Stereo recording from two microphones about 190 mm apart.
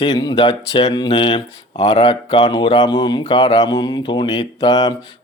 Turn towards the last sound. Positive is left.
turn(degrees=20)  # may be behind; listen again after turning